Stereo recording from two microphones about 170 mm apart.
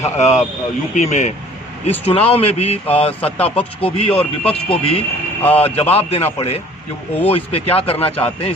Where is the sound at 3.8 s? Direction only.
35° left (ahead or behind).